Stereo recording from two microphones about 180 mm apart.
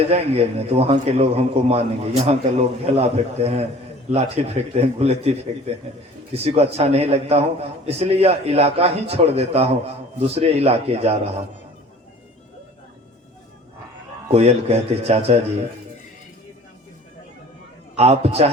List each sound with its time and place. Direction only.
0.1 s a man's voice: 35° right (ahead or behind)
14.3 s a man's voice: 35° right (ahead or behind)
17.9 s a man's voice: 35° right (ahead or behind)